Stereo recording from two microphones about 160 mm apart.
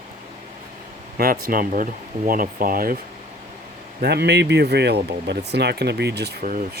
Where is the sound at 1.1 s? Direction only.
75° right (ahead or behind).